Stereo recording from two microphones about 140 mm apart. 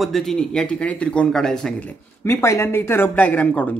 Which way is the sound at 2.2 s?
20° left (ahead or behind).